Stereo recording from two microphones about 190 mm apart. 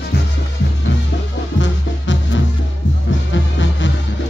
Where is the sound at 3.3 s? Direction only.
75° left (ahead or behind).